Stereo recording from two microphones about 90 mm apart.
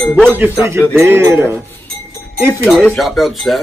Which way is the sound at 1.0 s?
30° right (ahead or behind).